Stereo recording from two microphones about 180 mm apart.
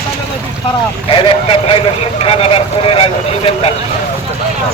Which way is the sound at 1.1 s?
30° left (ahead or behind).